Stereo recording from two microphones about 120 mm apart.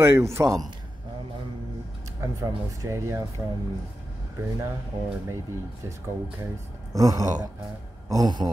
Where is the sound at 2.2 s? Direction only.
25° right (ahead or behind).